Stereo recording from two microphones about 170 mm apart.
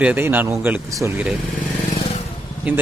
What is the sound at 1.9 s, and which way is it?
Vehicle, 40° left (ahead or behind).